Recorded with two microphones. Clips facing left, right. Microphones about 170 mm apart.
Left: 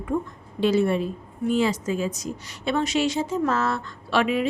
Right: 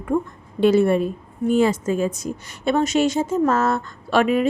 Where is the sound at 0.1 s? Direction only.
50° right (ahead or behind).